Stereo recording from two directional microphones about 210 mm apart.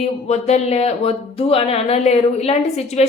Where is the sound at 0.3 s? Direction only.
30° left (ahead or behind).